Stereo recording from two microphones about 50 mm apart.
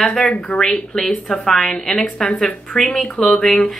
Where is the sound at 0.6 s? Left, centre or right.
Centre.